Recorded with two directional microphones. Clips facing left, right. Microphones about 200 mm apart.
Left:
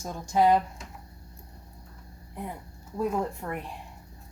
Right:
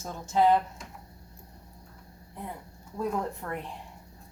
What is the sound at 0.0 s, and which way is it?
Speech, 15° left (ahead or behind).